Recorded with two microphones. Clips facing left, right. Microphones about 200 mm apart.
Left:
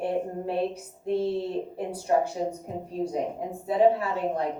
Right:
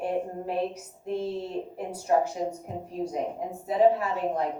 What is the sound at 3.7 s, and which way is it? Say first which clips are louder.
Speech: even; 30° left (ahead or behind).